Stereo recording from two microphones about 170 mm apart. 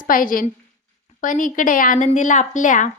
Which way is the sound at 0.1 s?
55° left (ahead or behind).